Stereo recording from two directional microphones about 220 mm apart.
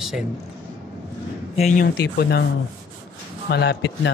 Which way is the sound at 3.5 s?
50° left (ahead or behind).